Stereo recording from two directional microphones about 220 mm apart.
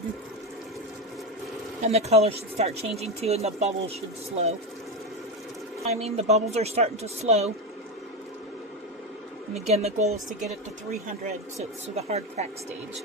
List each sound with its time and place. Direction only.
1.8 s speech: 30° right (ahead or behind)
5.8 s speech: 30° right (ahead or behind)
9.6 s speech: 30° right (ahead or behind)
11.9 s speech: 30° right (ahead or behind)